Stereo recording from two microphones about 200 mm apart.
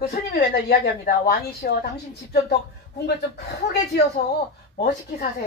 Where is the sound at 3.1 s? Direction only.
50° left (ahead or behind).